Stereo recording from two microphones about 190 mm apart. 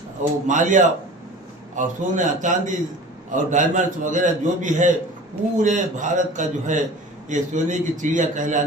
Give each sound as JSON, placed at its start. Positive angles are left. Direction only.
{"t": 0.4, "sound": "a man's voice", "side_deg": -40}